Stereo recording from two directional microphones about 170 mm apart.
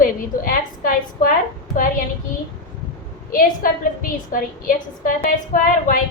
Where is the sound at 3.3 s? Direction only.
55° left (ahead or behind).